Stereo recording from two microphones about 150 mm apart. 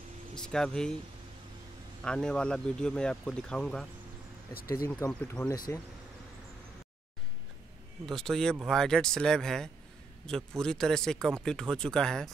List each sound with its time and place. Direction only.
0.3 s speech: 5° left (ahead or behind)
2.0 s speech: 5° left (ahead or behind)
4.6 s speech: 75° left (ahead or behind)
4.8 s speech: 20° left (ahead or behind)
8.1 s speech: 5° left (ahead or behind)